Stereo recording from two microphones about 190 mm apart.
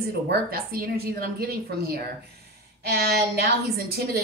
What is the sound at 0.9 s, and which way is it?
A woman's voice, 55° right (ahead or behind).